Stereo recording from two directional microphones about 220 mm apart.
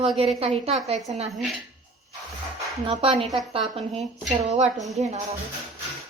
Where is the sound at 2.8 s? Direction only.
25° right (ahead or behind).